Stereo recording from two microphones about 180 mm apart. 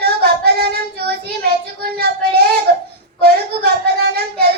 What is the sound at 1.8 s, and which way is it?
Child singing, 60° right (ahead or behind).